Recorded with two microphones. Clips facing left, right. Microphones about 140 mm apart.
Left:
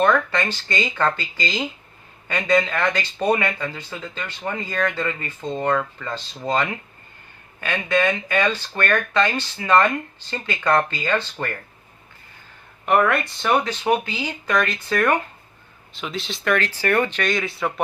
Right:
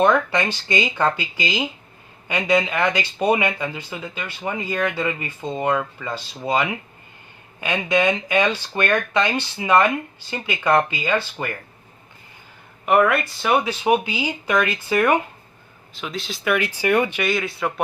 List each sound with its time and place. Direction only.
0.0 s speech: 15° right (ahead or behind)
12.8 s speech: 5° right (ahead or behind)
16.0 s speech: centre (ahead or behind)